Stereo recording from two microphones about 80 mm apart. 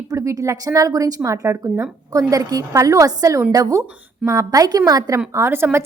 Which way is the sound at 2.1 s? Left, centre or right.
Right.